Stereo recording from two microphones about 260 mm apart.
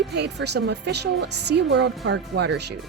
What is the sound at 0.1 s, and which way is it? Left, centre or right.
A woman's voice, right.